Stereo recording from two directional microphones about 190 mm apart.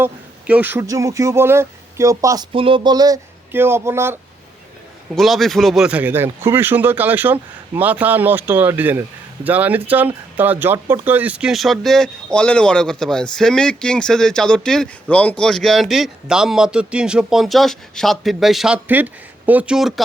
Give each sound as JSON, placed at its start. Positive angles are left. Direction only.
{"t": 0.0, "sound": "speech", "side_deg": -10}
{"t": 5.1, "sound": "speech", "side_deg": 0}